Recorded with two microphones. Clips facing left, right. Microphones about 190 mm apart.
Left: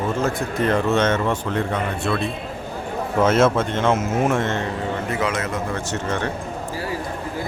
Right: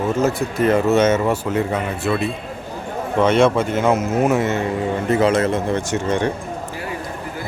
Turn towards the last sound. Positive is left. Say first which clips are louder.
# right 5 dB
turn(degrees=-15)  # may be behind; listen again after turning